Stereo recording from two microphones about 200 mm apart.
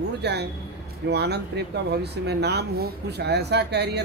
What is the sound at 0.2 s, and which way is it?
Speech, 55° right (ahead or behind).